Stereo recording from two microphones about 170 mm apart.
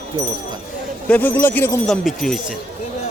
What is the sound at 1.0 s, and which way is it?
Speech, 10° left (ahead or behind).